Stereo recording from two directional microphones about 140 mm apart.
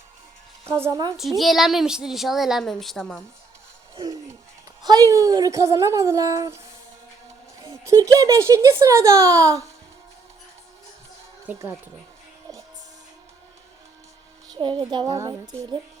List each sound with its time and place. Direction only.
0.6 s a woman's voice: 20° right (ahead or behind)
1.4 s a woman's voice: centre (ahead or behind)
3.9 s a sound: 25° right (ahead or behind)
4.8 s speech: 25° right (ahead or behind)
7.6 s speech: 25° right (ahead or behind)
11.4 s speech: 15° right (ahead or behind)
14.5 s a child's voice: 35° right (ahead or behind)